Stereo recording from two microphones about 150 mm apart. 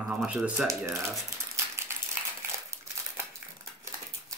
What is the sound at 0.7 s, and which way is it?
Speech, 20° right (ahead or behind).